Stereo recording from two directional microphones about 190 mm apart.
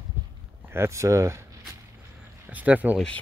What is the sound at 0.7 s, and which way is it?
Speech, 15° right (ahead or behind).